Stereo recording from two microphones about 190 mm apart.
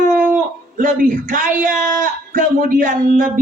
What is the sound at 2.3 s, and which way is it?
Speech, 45° right (ahead or behind).